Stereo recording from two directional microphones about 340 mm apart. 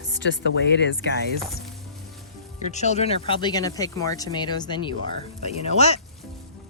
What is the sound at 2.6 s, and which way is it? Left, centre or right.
Speech, left.